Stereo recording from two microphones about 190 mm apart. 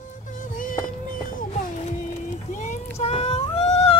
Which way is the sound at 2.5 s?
40° left (ahead or behind).